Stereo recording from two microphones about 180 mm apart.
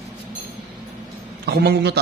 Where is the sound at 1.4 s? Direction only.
65° right (ahead or behind).